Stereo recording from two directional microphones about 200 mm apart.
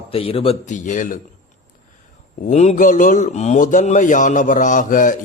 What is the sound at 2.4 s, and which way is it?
Speech, 35° left (ahead or behind).